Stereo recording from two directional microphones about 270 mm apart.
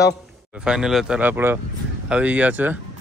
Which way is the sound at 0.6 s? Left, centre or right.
Centre.